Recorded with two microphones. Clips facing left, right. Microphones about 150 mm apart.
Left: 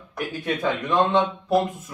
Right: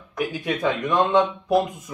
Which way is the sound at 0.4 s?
10° right (ahead or behind).